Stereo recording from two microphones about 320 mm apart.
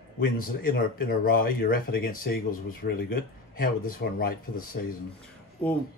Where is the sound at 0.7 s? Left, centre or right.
Left.